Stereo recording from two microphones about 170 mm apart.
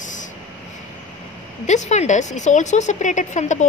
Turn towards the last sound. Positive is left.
turn(degrees=45)  # may be behind; listen again after turning